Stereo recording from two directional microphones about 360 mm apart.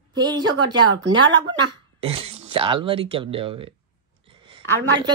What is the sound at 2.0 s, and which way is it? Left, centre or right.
A woman's voice, centre.